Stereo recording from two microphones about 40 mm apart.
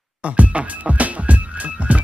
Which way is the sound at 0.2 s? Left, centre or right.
Right.